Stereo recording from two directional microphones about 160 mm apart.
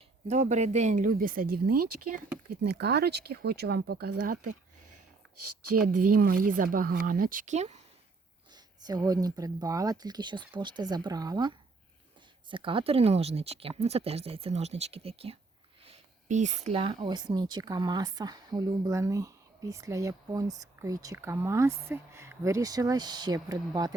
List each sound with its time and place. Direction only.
0.3 s speech: 45° right (ahead or behind); by 4.5 s 65° right (ahead or behind)
5.9 s speech: 60° right (ahead or behind); by 7.8 s 45° right (ahead or behind)
8.8 s speech: 25° right (ahead or behind)